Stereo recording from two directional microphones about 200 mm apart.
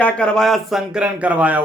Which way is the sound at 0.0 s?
5° left (ahead or behind).